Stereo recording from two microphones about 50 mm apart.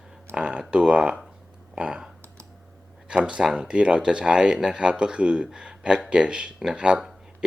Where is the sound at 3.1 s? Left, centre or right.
Right.